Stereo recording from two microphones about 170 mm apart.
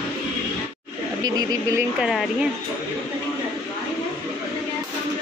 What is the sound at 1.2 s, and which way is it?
Speech, 20° right (ahead or behind).